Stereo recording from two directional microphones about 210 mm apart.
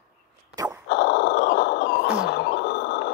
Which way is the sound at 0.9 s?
55° left (ahead or behind).